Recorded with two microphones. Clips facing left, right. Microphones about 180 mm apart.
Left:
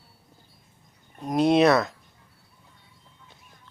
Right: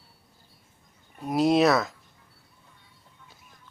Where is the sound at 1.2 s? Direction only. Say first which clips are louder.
Left 2 dB; 5° right (ahead or behind).